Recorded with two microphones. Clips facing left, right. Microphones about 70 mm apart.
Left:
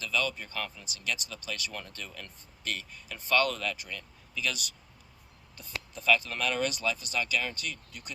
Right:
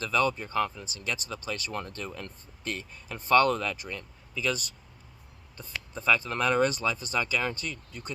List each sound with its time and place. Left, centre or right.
0.0 s speech: right